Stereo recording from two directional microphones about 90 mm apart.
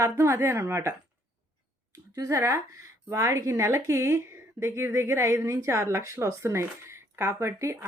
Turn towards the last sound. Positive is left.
turn(degrees=-30)  # may be behind; listen again after turning